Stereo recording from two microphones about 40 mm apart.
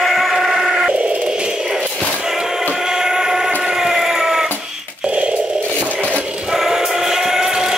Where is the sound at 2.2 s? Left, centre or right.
Centre.